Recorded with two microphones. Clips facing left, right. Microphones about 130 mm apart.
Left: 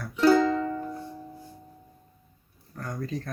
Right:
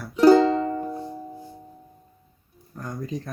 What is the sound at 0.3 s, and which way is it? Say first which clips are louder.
Music: right 5 dB; 35° right (ahead or behind).